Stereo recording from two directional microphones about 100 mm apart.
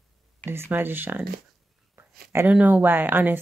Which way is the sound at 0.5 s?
20° right (ahead or behind).